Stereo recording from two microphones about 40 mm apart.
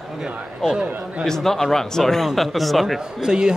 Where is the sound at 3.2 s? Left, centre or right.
Centre.